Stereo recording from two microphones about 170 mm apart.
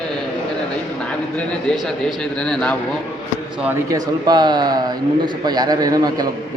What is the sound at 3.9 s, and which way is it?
A man's voice, 25° right (ahead or behind).